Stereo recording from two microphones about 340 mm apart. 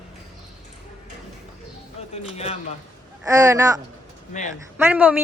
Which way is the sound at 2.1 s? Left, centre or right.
Centre.